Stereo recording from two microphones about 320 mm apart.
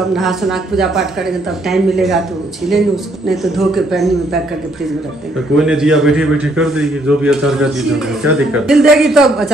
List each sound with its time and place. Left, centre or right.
0.1 s a man's voice: centre
5.6 s a man's voice: centre